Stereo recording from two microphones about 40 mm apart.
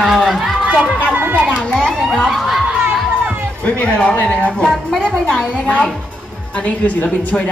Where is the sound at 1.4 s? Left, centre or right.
Left.